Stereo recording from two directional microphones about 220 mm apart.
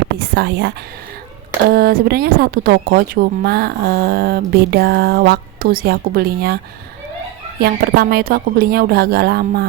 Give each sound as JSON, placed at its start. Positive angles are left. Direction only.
{"t": 0.2, "sound": "speech", "side_deg": -50}
{"t": 7.6, "sound": "speech", "side_deg": -45}